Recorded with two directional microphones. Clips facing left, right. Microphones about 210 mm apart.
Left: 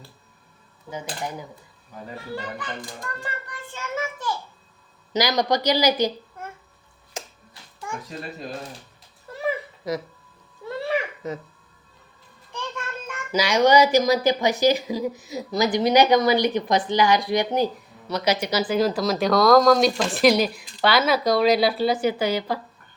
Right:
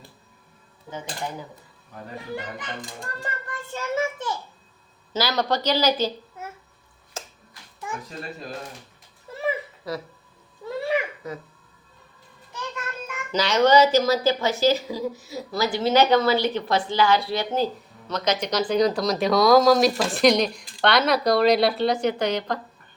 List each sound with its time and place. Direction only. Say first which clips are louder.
2.1 s a child's voice: even; 20° right (ahead or behind)
3.0 s a child's voice: left 2 dB; 30° right (ahead or behind)
3.9 s a sound: right 3 dB; 30° right (ahead or behind)
5.1 s speech: left 2 dB; 15° left (ahead or behind)
6.4 s babbling: even; 5° right (ahead or behind)
7.2 s a sound: left 2 dB; 15° left (ahead or behind)
9.3 s a sound: even; centre (ahead or behind)
9.9 s speech: left 4 dB; 20° left (ahead or behind)
10.6 s a sound: right 1 dB; 5° left (ahead or behind)
11.2 s music: left 3 dB; 25° left (ahead or behind)
12.5 s music: left 1 dB; 5° right (ahead or behind)
13.3 s speech: even; 10° left (ahead or behind)